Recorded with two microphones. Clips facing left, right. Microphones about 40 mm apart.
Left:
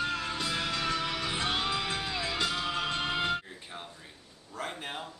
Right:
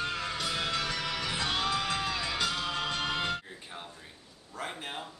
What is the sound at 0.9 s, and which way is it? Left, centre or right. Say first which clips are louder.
Music: left 1 dB; centre.